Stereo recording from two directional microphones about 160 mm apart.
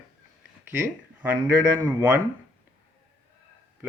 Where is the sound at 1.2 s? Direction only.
10° right (ahead or behind).